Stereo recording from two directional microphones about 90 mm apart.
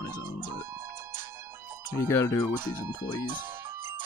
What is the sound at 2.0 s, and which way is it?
Speech, 30° left (ahead or behind).